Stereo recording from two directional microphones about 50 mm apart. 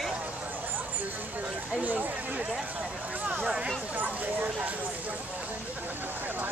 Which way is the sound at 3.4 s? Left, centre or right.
Centre.